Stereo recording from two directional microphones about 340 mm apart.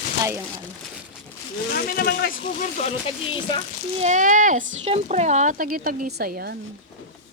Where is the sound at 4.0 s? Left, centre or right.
Right.